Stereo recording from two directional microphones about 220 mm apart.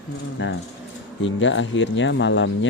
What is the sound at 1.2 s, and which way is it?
Speech, 55° left (ahead or behind).